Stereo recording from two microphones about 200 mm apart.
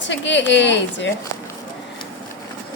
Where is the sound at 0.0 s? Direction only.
65° left (ahead or behind).